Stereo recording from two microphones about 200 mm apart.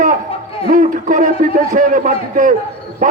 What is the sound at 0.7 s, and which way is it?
A man's voice, 40° right (ahead or behind).